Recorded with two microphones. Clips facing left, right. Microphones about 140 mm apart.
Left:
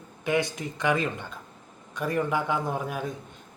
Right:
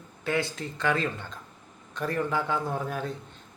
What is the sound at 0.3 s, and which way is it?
A man's voice, 15° left (ahead or behind).